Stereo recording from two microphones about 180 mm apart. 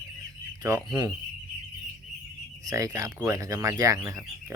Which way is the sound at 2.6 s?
20° right (ahead or behind).